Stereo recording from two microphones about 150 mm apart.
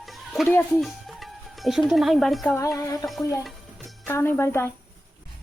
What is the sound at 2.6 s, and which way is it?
Music, 20° left (ahead or behind).